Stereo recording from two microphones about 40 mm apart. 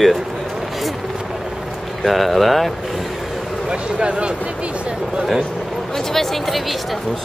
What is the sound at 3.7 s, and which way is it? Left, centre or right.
Speech, right.